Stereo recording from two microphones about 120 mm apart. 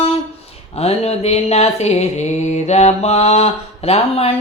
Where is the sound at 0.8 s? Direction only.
60° left (ahead or behind).